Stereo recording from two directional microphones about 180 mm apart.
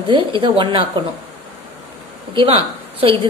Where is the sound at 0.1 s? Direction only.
25° right (ahead or behind).